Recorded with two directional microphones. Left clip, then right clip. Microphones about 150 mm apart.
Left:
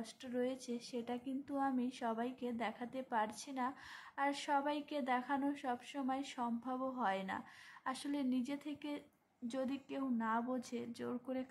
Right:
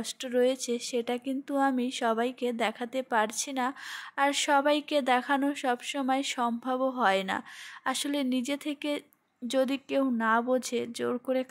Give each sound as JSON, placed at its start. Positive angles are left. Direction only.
{"t": 0.0, "sound": "speech", "side_deg": -35}